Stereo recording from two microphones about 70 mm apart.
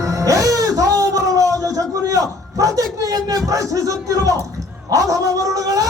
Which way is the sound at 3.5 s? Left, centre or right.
Right.